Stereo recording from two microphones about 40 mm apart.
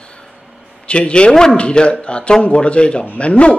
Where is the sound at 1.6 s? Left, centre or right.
Left.